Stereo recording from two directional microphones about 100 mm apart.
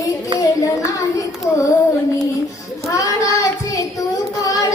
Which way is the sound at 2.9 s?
30° left (ahead or behind).